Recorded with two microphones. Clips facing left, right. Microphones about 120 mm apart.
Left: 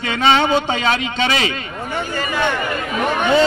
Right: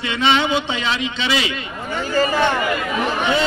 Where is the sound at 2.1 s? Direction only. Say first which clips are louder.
Right 5 dB; 40° right (ahead or behind).